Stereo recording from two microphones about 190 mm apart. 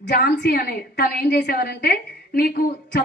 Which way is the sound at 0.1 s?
55° left (ahead or behind).